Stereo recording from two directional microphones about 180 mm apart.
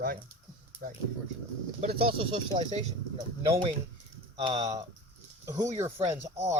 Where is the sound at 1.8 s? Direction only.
35° right (ahead or behind).